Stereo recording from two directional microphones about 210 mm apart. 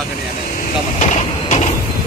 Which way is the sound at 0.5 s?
40° left (ahead or behind).